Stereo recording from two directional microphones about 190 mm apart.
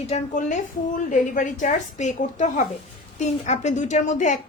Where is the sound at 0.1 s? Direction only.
40° left (ahead or behind).